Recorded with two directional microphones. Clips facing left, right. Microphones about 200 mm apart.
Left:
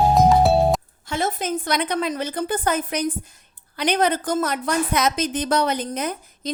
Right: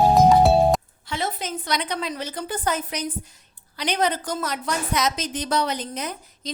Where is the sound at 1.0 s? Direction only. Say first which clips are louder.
Left 5 dB; 50° left (ahead or behind).